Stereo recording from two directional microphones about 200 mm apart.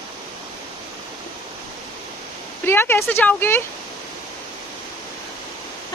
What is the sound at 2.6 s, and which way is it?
Speech, 10° left (ahead or behind).